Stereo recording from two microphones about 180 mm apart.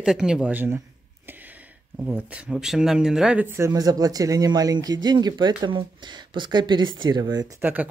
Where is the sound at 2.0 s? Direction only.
10° right (ahead or behind).